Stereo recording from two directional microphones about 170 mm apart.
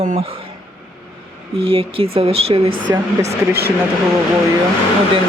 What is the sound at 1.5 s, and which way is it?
Speech, 35° right (ahead or behind).